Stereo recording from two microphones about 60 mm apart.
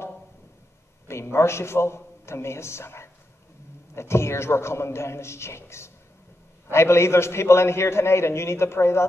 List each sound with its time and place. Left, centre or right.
1.0 s a man's voice: left